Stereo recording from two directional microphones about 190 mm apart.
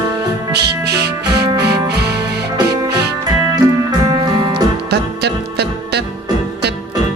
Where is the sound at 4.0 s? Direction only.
20° right (ahead or behind).